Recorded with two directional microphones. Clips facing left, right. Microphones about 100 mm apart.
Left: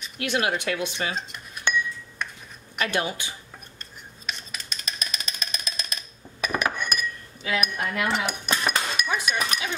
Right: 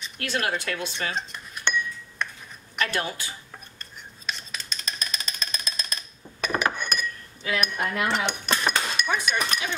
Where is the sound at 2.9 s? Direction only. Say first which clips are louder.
Left 2 dB; 20° left (ahead or behind).